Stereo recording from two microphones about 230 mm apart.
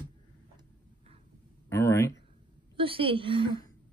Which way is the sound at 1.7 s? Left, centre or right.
Centre.